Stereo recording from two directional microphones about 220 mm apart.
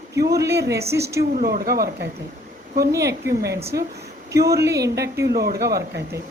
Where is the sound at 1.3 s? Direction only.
40° right (ahead or behind).